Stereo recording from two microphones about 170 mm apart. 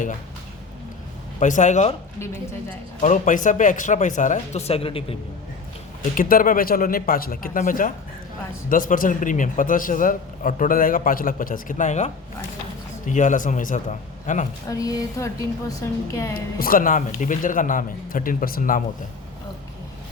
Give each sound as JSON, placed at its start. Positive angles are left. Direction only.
{"t": 1.4, "sound": "a man's voice", "side_deg": 45}
{"t": 2.1, "sound": "a woman's voice", "side_deg": 15}
{"t": 3.0, "sound": "a man's voice", "side_deg": 50}
{"t": 6.0, "sound": "a man's voice", "side_deg": 55}
{"t": 14.7, "sound": "a woman's voice", "side_deg": 20}
{"t": 16.3, "sound": "a man's voice", "side_deg": 60}